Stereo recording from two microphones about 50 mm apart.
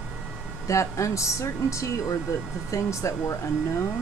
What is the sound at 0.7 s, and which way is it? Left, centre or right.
Speech, left.